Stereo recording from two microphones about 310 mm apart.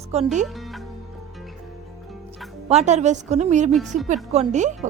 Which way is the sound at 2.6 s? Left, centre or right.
Right.